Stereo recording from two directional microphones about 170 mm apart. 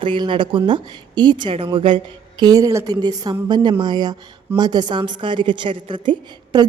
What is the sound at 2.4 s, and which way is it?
A woman's voice, 20° right (ahead or behind).